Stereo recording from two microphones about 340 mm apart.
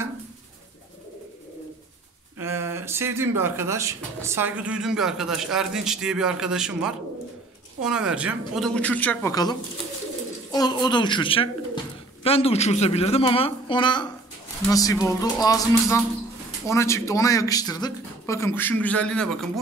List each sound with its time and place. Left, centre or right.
2.3 s speech: centre